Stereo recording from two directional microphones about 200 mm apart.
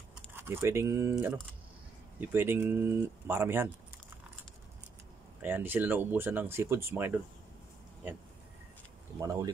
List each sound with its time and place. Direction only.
0.1 s speech: 10° right (ahead or behind)
5.4 s speech: 10° right (ahead or behind)
9.2 s speech: 15° right (ahead or behind)